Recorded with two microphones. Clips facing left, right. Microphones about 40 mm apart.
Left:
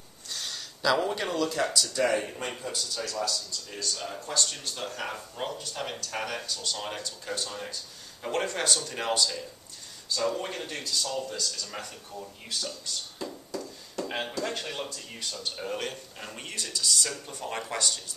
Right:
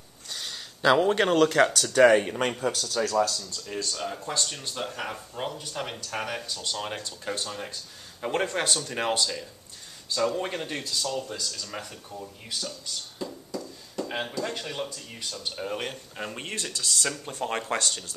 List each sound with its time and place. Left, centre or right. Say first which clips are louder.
0.3 s a sound: even; centre
0.8 s speech: right 5 dB; right
1.1 s speech: right 8 dB; right
3.6 s a man's voice: right 7 dB; right
11.1 s speech: right 1 dB; centre
13.2 s a sound: right 3 dB; centre
15.5 s speech: right 3 dB; centre
16.3 s speech: right 2 dB; right